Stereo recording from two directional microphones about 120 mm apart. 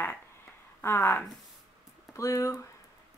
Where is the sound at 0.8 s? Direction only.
20° left (ahead or behind).